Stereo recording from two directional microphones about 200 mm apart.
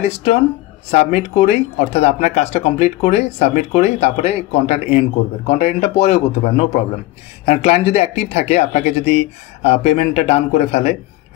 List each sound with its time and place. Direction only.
0.0 s speech: 30° left (ahead or behind)